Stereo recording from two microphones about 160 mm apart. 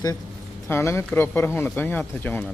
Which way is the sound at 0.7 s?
15° left (ahead or behind).